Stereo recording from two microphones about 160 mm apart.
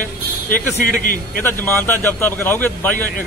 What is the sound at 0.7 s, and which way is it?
Speech, 60° left (ahead or behind).